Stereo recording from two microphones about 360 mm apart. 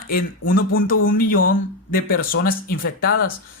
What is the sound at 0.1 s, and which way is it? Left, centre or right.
Speech, left.